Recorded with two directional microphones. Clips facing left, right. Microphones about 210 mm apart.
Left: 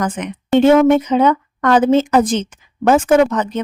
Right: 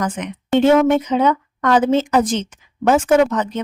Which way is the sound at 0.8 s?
50° left (ahead or behind).